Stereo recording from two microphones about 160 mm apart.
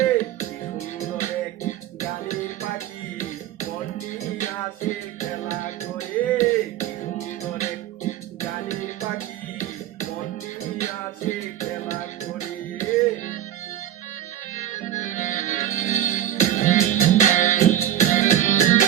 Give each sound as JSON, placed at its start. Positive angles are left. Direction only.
{"t": 1.2, "sound": "music", "side_deg": 50}
{"t": 4.4, "sound": "music", "side_deg": 50}
{"t": 10.8, "sound": "music", "side_deg": 50}
{"t": 14.6, "sound": "music", "side_deg": 50}